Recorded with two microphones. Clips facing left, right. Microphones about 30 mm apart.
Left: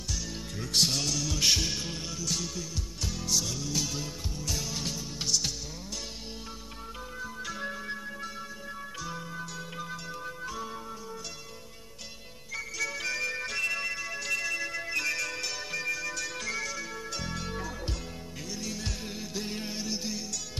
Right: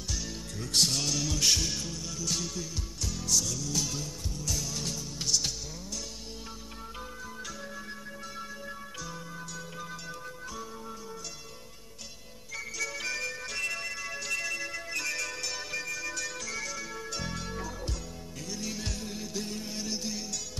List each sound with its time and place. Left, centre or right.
0.3 s music: centre
2.2 s music: centre
3.0 s music: centre
7.2 s music: centre
12.5 s music: centre
13.3 s bagpipes: centre
13.6 s music: centre
18.9 s music: centre
19.4 s music: left
19.7 s music: centre